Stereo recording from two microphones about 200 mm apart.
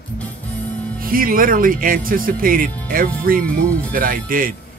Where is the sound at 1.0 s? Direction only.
45° right (ahead or behind).